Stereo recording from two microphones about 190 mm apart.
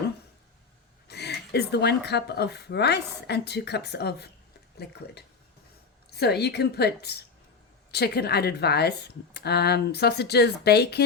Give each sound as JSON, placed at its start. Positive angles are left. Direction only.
{"t": 1.0, "sound": "speech", "side_deg": 60}
{"t": 6.1, "sound": "speech", "side_deg": 60}